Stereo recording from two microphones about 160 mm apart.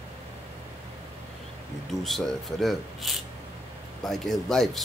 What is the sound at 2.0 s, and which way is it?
Speech, centre (ahead or behind).